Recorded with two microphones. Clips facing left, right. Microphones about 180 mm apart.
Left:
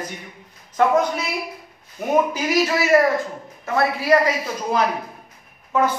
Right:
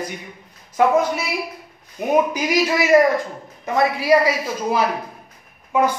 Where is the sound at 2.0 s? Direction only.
15° right (ahead or behind).